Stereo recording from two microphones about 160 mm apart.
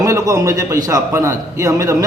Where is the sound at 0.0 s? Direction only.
20° right (ahead or behind).